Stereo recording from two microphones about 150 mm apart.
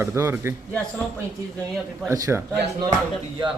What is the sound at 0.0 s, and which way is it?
Speech, 15° right (ahead or behind).